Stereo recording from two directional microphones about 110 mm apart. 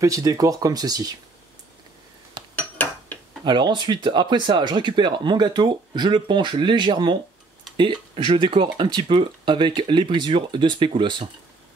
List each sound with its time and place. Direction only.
0.0 s speech: 30° right (ahead or behind)
2.5 s a sound: 15° left (ahead or behind)
3.4 s speech: 45° right (ahead or behind)